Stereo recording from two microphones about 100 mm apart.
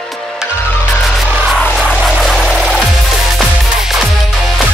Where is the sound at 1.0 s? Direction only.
Centre (ahead or behind).